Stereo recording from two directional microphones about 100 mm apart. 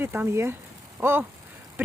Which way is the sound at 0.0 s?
20° right (ahead or behind).